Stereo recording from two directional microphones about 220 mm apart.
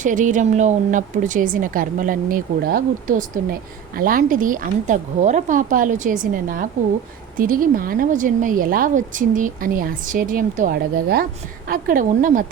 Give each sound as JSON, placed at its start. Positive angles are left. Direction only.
{"t": 0.0, "sound": "a woman's voice", "side_deg": -35}